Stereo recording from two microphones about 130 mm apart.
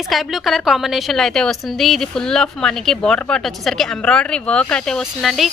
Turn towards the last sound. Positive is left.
turn(degrees=0)  # may be behind; listen again after turning